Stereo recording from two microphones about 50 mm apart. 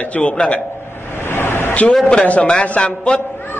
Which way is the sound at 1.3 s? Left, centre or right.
Left.